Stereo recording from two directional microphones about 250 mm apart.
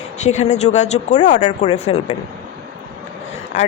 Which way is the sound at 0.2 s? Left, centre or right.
Left.